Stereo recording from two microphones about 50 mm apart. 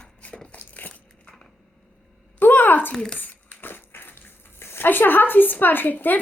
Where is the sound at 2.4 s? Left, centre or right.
Left.